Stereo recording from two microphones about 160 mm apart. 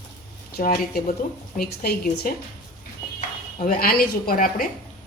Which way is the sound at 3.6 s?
65° left (ahead or behind).